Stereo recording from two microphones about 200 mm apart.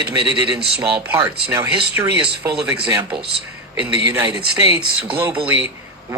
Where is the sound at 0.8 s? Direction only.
10° right (ahead or behind).